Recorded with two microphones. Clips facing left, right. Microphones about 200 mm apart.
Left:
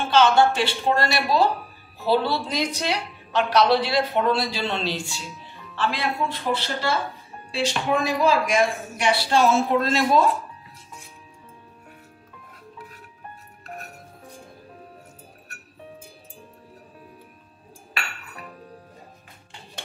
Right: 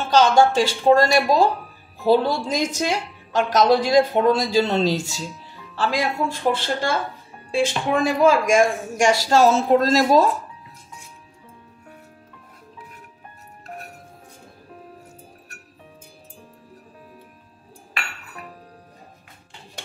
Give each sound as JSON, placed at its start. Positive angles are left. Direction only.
{"t": 0.1, "sound": "speech", "side_deg": -40}